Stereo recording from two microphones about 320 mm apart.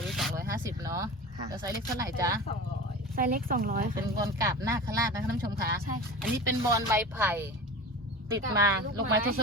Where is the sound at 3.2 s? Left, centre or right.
Right.